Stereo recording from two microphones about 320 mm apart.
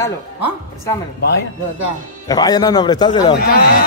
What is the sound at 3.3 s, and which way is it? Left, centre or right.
Speech, left.